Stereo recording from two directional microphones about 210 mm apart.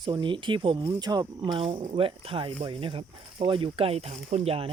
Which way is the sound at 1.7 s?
35° right (ahead or behind).